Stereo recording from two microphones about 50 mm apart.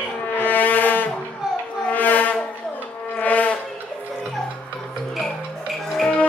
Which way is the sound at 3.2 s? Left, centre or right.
Left.